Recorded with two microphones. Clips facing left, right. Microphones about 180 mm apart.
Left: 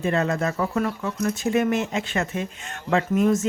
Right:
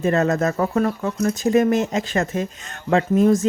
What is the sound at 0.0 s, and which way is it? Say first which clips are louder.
Speech: right 4 dB; 45° right (ahead or behind).